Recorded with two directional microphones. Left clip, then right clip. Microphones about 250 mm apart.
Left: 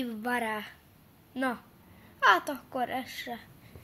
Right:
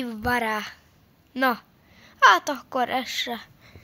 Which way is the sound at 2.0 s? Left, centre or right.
Right.